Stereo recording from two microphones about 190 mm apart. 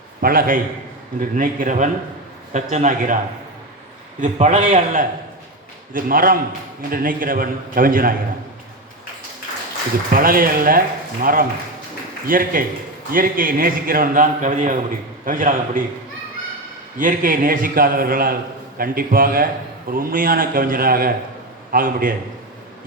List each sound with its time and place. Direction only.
0.2 s a man's voice: 50° right (ahead or behind)
4.2 s a man's voice: 40° right (ahead or behind)
10.2 s a man's voice: 50° right (ahead or behind)
17.0 s a man's voice: 45° right (ahead or behind)